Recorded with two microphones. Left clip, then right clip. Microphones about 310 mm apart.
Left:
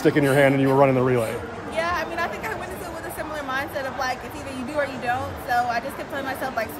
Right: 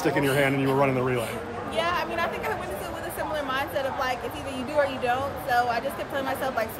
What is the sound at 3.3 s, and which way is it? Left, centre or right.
A woman's voice, centre.